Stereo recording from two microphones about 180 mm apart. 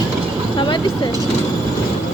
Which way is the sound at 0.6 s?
25° left (ahead or behind).